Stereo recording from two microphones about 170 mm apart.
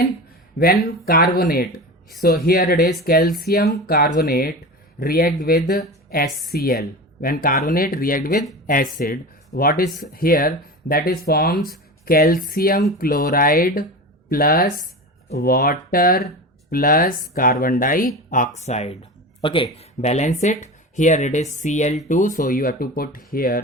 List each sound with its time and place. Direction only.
1.0 s speech: 65° left (ahead or behind)